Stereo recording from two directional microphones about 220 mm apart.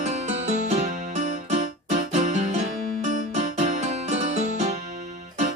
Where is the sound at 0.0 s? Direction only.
30° right (ahead or behind).